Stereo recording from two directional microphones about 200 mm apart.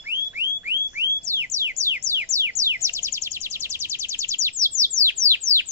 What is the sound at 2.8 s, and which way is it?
Bird, 15° right (ahead or behind).